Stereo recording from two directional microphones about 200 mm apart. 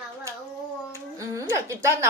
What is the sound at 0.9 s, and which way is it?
Music, 15° right (ahead or behind).